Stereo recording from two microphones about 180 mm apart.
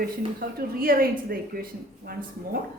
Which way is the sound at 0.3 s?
55° right (ahead or behind).